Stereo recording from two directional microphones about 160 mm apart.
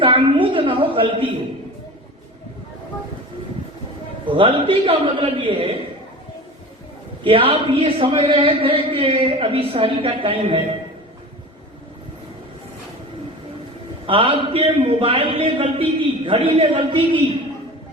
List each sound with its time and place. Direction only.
0.0 s a sound: 35° right (ahead or behind)
4.3 s a man's voice: 35° right (ahead or behind)
7.3 s a man's voice: 35° right (ahead or behind)
14.1 s a man's voice: 35° right (ahead or behind)